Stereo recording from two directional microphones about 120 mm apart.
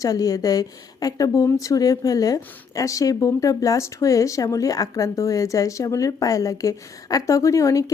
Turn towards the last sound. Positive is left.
turn(degrees=25)  # may be behind; listen again after turning